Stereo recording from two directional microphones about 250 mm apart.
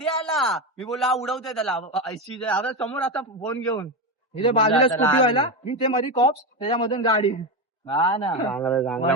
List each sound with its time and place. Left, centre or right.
0.0 s a man's voice: centre
4.4 s a man's voice: left
8.5 s a man's voice: centre